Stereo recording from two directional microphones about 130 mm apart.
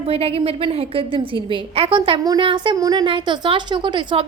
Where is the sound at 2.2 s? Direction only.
35° right (ahead or behind).